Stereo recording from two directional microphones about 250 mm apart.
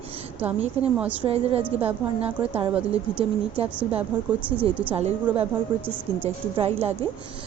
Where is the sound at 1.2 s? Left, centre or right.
Right.